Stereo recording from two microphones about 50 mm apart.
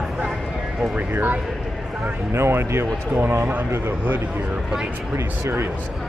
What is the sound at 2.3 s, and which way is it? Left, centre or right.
Speech, right.